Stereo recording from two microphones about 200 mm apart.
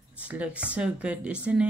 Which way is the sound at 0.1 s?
5° right (ahead or behind).